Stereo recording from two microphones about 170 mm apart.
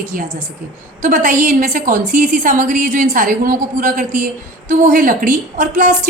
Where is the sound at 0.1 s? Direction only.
50° right (ahead or behind).